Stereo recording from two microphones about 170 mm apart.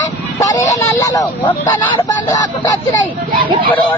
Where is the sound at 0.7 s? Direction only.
20° left (ahead or behind).